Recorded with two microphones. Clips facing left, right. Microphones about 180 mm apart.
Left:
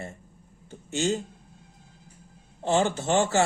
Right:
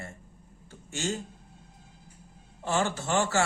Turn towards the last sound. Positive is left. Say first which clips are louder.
# left 4 dB
turn(degrees=20)  # may be behind; listen again after turning